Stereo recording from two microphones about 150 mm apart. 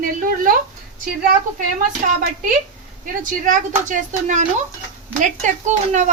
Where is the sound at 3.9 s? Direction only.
60° right (ahead or behind).